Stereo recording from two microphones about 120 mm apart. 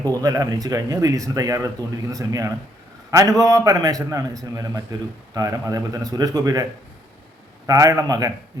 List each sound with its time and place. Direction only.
0.1 s a man's voice: 30° right (ahead or behind)
7.7 s a man's voice: 30° right (ahead or behind)